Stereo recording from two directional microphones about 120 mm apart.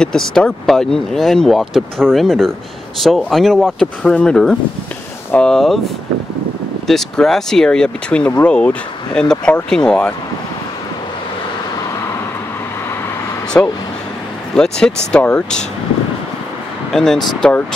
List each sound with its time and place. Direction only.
0.0 s speech: 5° left (ahead or behind)
6.9 s speech: 5° left (ahead or behind)
13.5 s speech: 15° left (ahead or behind)
14.5 s speech: 5° left (ahead or behind)
16.9 s speech: 5° left (ahead or behind)